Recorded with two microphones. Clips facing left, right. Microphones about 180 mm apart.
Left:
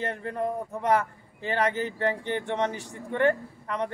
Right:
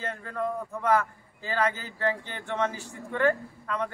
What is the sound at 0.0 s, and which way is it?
Speech, 20° left (ahead or behind).